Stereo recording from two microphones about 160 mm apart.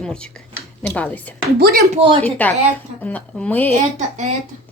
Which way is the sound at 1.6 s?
70° right (ahead or behind).